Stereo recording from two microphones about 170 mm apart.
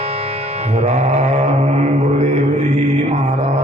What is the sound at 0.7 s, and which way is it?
Mantra, 40° right (ahead or behind).